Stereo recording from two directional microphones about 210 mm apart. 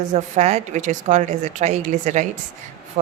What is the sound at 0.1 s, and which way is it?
A woman's voice, 30° right (ahead or behind).